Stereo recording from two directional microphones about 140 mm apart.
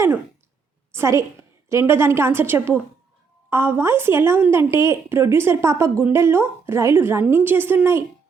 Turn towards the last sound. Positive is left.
turn(degrees=-15)  # may be behind; listen again after turning